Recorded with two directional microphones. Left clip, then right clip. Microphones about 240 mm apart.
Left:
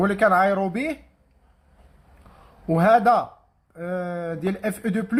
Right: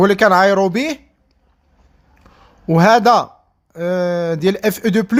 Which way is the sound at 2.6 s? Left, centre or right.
Right.